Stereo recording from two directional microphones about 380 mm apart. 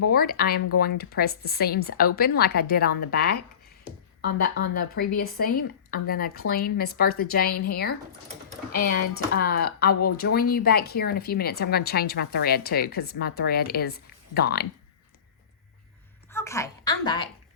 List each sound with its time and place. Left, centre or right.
0.1 s a woman's voice: left
4.7 s a woman's voice: left
9.9 s speech: left
10.2 s a woman's voice: left
16.3 s a sound: centre